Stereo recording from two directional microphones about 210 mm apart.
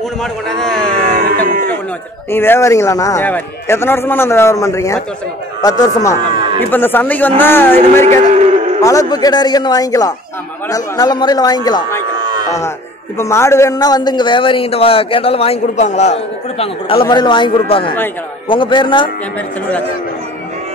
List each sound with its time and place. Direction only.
0.2 s a man's voice: centre (ahead or behind)
0.9 s music: 45° right (ahead or behind)
2.3 s a man's voice: 10° left (ahead or behind)
7.8 s a sound: 35° right (ahead or behind)
8.8 s a man's voice: 15° left (ahead or behind)
13.2 s a man's voice: 15° left (ahead or behind)